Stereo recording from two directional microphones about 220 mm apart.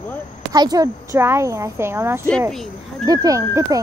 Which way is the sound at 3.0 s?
15° right (ahead or behind).